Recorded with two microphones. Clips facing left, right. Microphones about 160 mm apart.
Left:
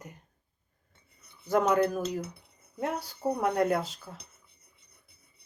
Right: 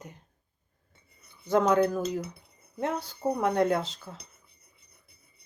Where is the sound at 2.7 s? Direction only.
Centre (ahead or behind).